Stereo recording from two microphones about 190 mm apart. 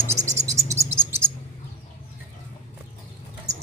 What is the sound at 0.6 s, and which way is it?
Music, 15° right (ahead or behind).